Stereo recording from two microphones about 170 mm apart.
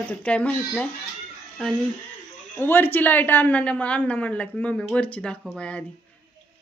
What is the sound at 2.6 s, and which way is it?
A woman's voice, 15° left (ahead or behind).